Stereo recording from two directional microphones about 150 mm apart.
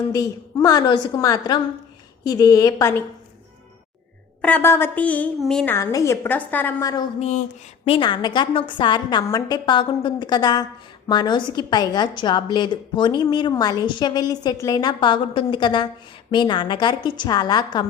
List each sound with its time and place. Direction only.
0.1 s a woman's voice: 25° left (ahead or behind)
4.4 s a woman's voice: 10° left (ahead or behind)
5.7 s a woman's voice: 20° left (ahead or behind)
7.2 s speech: 50° left (ahead or behind)
7.9 s a woman's voice: 35° left (ahead or behind)